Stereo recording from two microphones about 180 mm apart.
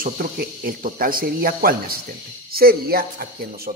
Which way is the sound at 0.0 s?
55° right (ahead or behind).